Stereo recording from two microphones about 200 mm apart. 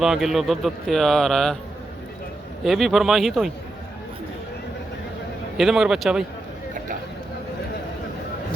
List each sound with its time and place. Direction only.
0.0 s speech: centre (ahead or behind)
2.6 s speech: centre (ahead or behind)
5.5 s speech: centre (ahead or behind)